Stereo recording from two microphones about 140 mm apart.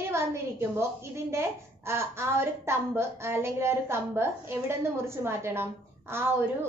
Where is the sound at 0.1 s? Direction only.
20° right (ahead or behind).